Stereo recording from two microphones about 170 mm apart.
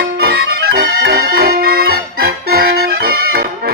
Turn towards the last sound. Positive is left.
turn(degrees=-60)  # may be behind; listen again after turning